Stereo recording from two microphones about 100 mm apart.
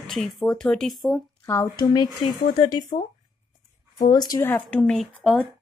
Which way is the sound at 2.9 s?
65° left (ahead or behind).